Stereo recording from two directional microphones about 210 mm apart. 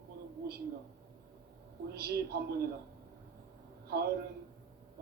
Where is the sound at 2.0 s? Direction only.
50° right (ahead or behind).